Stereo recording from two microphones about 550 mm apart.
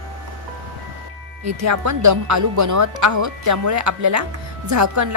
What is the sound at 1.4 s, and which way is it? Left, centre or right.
Speech, right.